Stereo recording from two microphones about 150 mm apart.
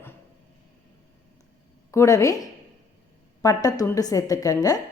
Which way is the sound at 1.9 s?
20° left (ahead or behind).